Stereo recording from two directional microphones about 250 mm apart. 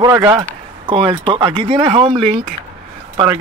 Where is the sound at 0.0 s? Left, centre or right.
Centre.